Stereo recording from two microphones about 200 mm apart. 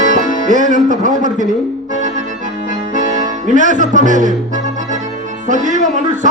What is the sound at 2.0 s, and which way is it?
Accordion, 40° right (ahead or behind).